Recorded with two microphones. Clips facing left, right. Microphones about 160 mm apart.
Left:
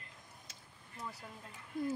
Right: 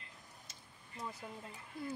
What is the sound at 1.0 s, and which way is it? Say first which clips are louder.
Speech: right 1 dB; 20° right (ahead or behind).